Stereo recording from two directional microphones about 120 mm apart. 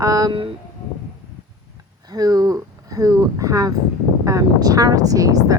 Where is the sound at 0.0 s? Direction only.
30° right (ahead or behind).